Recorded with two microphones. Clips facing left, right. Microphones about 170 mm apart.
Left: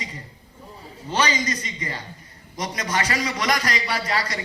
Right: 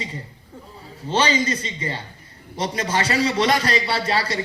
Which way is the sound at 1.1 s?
30° right (ahead or behind).